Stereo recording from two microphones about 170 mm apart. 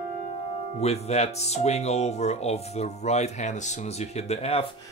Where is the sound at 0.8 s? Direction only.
40° left (ahead or behind).